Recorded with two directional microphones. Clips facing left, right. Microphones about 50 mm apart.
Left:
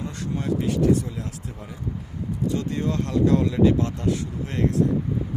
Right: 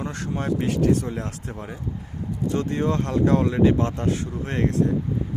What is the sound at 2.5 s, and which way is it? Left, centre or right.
Speech, right.